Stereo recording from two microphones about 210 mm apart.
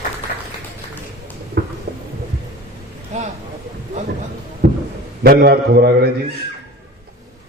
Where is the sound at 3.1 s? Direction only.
35° right (ahead or behind).